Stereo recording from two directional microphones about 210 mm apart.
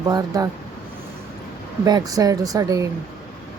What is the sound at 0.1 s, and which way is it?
Speech, 15° right (ahead or behind).